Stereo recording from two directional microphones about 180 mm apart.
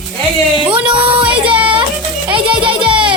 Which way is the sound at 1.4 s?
30° right (ahead or behind).